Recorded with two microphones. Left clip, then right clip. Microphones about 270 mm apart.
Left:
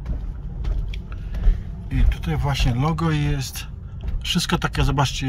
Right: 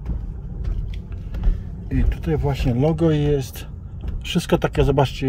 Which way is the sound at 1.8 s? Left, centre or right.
Centre.